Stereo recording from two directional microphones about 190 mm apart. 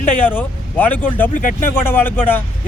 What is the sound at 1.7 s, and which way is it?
Speech, 10° left (ahead or behind).